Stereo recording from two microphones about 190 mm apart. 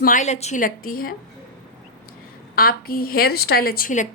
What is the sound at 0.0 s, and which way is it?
A woman's voice, 40° left (ahead or behind).